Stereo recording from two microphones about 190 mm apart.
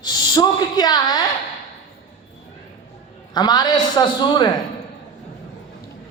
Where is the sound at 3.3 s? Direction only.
20° left (ahead or behind).